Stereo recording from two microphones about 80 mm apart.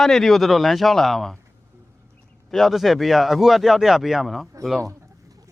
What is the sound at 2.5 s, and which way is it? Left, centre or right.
Speech, centre.